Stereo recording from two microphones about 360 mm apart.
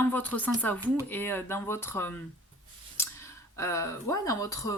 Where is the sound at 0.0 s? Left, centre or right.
Centre.